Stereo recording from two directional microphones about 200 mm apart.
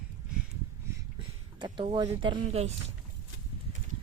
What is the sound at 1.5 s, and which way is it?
Speech, 25° right (ahead or behind).